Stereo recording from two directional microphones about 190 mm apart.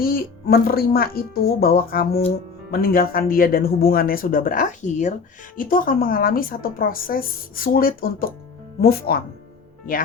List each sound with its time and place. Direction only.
0.0 s a woman's voice: 50° left (ahead or behind)